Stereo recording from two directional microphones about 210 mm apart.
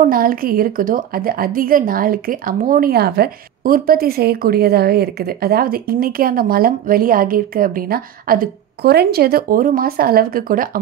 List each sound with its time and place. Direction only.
0.0 s a woman's voice: 40° right (ahead or behind)